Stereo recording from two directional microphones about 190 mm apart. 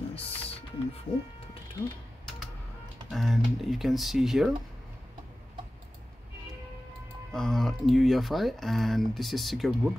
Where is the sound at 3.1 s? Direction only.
Centre (ahead or behind).